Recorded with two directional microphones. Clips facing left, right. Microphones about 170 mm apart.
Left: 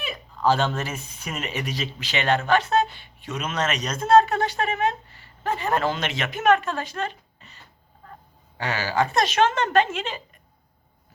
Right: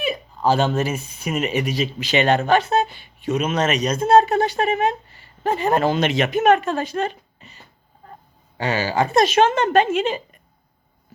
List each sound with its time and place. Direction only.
0.4 s speech: 10° right (ahead or behind)
3.2 s speech: 20° right (ahead or behind)
8.5 s speech: 15° right (ahead or behind)